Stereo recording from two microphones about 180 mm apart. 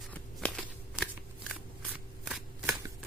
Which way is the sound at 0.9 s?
Centre (ahead or behind).